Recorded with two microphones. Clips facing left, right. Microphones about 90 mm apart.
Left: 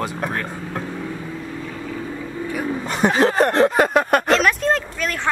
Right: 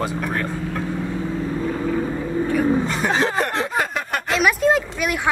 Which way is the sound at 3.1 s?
40° left (ahead or behind).